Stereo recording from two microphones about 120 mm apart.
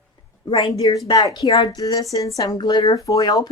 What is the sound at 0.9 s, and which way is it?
Speech, 35° left (ahead or behind).